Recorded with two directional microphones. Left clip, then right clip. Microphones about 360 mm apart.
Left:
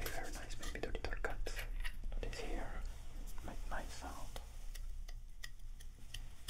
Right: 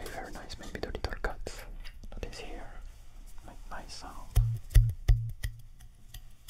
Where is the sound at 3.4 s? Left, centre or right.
Centre.